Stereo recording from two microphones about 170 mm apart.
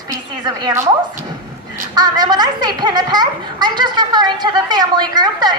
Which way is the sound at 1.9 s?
25° right (ahead or behind).